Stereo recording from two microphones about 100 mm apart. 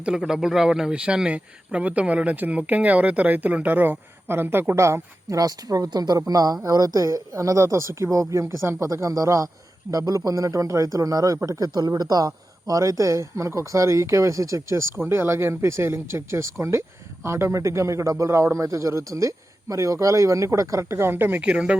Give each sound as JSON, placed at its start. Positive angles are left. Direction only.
{"t": 0.0, "sound": "a man's voice", "side_deg": -5}